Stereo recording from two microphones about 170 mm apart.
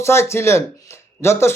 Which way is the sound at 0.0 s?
15° left (ahead or behind).